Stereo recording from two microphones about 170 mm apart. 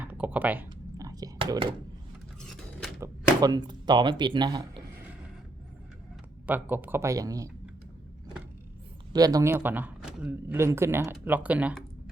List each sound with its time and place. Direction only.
0.0 s computer keyboard: 10° right (ahead or behind)
2.4 s keys jangling: 5° left (ahead or behind)
3.0 s speech: 25° right (ahead or behind)
6.4 s speech: 10° right (ahead or behind)
9.1 s speech: 20° right (ahead or behind)